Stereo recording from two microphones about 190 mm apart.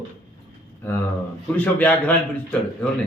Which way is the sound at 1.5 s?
10° left (ahead or behind).